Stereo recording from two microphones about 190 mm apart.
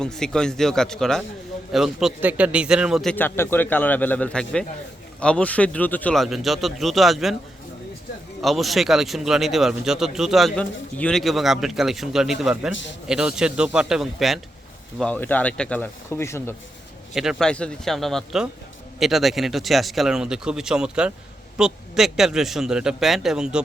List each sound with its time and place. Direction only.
0.0 s speech: 5° left (ahead or behind)
8.4 s speech: centre (ahead or behind)
12.7 s a man's voice: 70° left (ahead or behind)
13.1 s speech: 5° right (ahead or behind); by 16.6 s 15° left (ahead or behind)
17.2 s speech: centre (ahead or behind)